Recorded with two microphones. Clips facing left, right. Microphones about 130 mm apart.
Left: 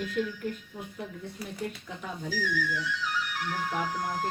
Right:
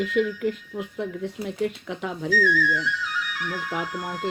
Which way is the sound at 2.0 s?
75° right (ahead or behind).